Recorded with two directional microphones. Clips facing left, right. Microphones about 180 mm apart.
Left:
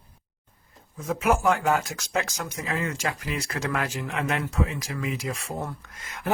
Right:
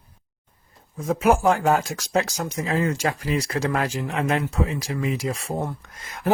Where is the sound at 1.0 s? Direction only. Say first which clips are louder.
Right 4 dB; 35° right (ahead or behind).